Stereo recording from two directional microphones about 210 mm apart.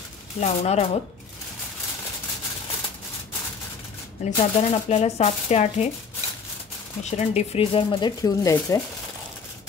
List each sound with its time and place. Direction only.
0.4 s speech: 30° left (ahead or behind)
4.2 s speech: 35° left (ahead or behind)
7.0 s speech: 30° left (ahead or behind); by 8.8 s 15° left (ahead or behind)